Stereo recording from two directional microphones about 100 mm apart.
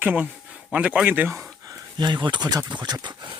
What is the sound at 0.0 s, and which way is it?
Speech, 15° right (ahead or behind).